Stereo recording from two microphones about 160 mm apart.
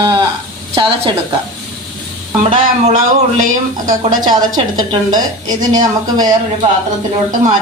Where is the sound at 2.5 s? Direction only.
45° right (ahead or behind).